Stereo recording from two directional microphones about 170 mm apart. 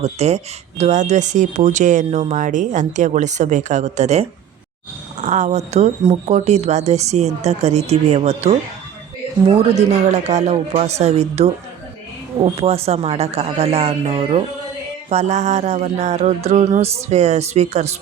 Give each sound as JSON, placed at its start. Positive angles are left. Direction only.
{"t": 0.0, "sound": "speech", "side_deg": -40}